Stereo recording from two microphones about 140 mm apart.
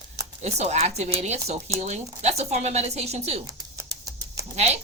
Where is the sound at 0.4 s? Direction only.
50° right (ahead or behind).